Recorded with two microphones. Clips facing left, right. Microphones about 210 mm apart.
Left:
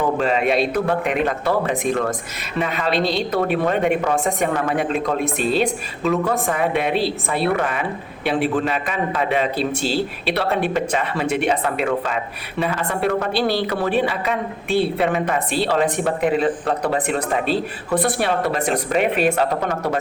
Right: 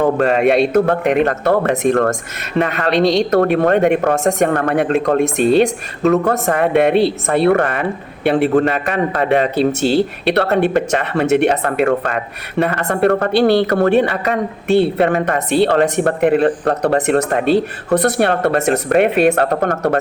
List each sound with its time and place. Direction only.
0.0 s speech: 60° right (ahead or behind)
0.7 s a woman's voice: 45° right (ahead or behind)
1.3 s speech: 60° right (ahead or behind)
5.1 s a woman's voice: 45° right (ahead or behind)
6.3 s a woman's voice: 65° right (ahead or behind)